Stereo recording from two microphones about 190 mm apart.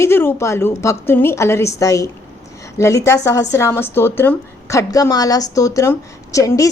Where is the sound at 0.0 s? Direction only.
10° left (ahead or behind).